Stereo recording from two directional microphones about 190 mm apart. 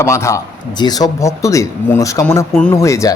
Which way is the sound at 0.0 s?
15° left (ahead or behind).